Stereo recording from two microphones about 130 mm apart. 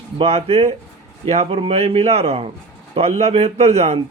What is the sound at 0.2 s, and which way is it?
Speech, 50° right (ahead or behind).